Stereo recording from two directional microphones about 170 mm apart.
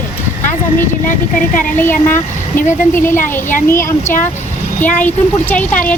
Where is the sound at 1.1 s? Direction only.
50° left (ahead or behind).